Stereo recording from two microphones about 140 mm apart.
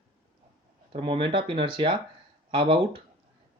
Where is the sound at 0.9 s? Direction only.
40° right (ahead or behind).